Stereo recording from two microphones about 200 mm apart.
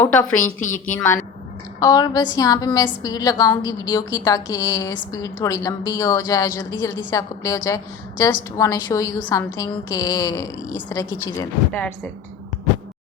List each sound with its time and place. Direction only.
0.0 s a woman's voice: 10° left (ahead or behind)
1.8 s a woman's voice: 20° left (ahead or behind)